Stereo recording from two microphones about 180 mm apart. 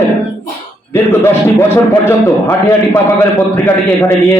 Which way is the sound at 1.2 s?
15° left (ahead or behind).